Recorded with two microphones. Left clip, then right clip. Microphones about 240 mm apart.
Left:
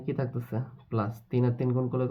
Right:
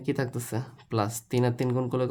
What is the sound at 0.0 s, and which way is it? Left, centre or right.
Speech, right.